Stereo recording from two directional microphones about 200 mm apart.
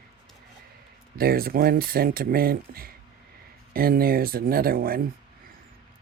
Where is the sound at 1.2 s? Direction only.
50° right (ahead or behind).